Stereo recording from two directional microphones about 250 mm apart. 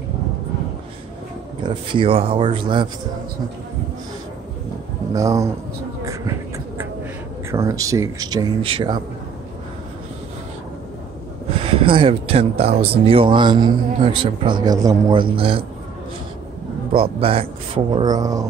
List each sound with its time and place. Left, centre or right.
1.6 s speech: centre
5.1 s speech: centre
7.5 s speech: centre
11.6 s speech: right
16.9 s speech: right